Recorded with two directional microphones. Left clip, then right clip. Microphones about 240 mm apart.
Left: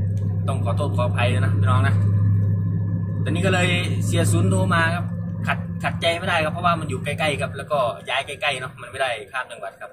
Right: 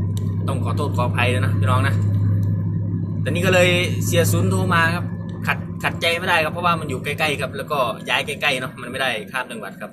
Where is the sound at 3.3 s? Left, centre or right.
Centre.